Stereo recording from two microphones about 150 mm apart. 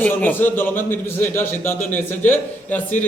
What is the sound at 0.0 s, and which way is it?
A man's voice, 10° left (ahead or behind).